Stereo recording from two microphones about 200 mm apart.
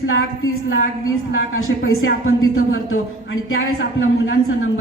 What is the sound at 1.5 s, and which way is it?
A man's voice, 90° left.